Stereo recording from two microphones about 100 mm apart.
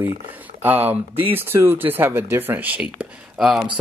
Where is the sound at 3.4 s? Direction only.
5° right (ahead or behind).